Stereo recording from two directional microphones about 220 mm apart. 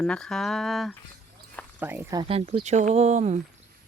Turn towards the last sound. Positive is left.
turn(degrees=-30)  # may be behind; listen again after turning